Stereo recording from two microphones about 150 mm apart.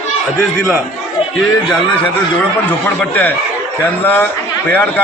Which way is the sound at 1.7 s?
10° left (ahead or behind).